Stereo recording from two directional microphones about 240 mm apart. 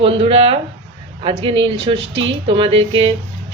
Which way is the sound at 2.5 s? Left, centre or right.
Right.